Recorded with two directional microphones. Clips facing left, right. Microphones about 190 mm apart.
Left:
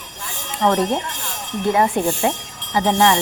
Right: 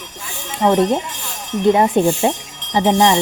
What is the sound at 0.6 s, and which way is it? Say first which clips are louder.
Speech: right 4 dB; 15° right (ahead or behind).